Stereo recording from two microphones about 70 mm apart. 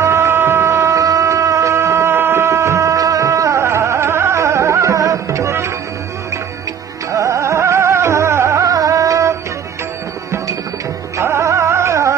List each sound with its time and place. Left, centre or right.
0.0 s music: right
7.1 s music: right
8.6 s music: right
11.1 s music: right